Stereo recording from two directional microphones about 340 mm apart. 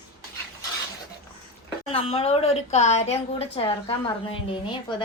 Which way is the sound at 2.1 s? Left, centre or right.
Centre.